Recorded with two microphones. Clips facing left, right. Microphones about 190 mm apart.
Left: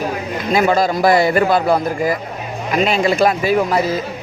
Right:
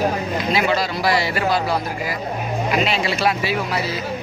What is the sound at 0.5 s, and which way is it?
A man's voice, 50° left (ahead or behind).